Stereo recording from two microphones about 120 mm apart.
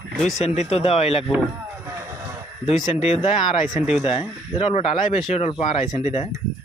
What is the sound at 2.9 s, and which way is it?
Speech, 60° left (ahead or behind).